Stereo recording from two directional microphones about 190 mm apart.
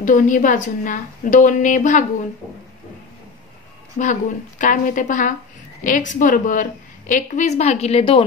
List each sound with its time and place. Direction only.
0.0 s a woman's voice: 45° left (ahead or behind)
4.0 s a woman's voice: 40° left (ahead or behind)